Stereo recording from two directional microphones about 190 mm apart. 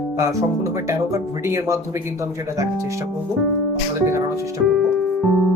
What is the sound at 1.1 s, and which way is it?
Speech, 15° right (ahead or behind).